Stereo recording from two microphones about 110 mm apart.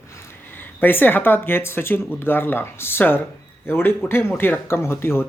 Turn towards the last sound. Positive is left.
turn(degrees=20)  # may be behind; listen again after turning